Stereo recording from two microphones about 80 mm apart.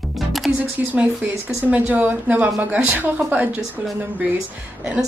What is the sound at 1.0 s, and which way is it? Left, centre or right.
A woman's voice, right.